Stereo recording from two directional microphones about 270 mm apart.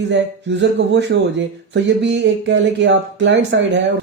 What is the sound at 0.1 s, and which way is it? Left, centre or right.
Speech, right.